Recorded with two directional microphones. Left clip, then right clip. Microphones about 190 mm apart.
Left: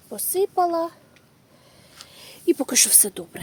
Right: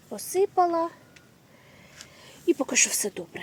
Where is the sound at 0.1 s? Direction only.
15° left (ahead or behind).